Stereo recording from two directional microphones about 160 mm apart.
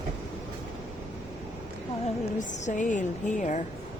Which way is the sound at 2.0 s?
50° left (ahead or behind).